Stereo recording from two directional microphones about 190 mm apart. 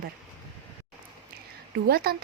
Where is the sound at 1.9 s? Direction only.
55° right (ahead or behind).